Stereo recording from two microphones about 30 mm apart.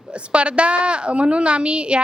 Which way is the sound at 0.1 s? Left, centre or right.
Right.